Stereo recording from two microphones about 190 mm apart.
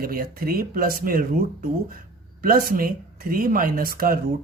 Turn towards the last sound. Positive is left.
turn(degrees=-50)  # may be behind; listen again after turning